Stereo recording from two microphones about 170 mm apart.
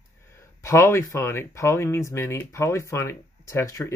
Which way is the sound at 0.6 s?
15° left (ahead or behind).